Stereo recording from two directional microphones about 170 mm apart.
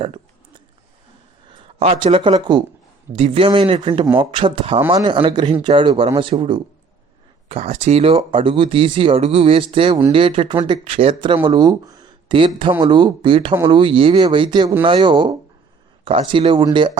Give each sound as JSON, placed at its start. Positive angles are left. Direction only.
{"t": 1.5, "sound": "speech", "side_deg": -35}